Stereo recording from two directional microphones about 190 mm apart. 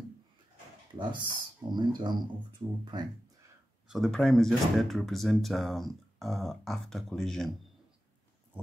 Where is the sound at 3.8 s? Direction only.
Centre (ahead or behind).